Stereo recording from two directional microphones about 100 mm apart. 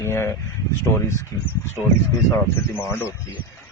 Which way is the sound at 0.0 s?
25° left (ahead or behind).